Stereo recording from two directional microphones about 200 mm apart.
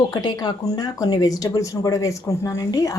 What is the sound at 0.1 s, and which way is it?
Speech, 20° left (ahead or behind).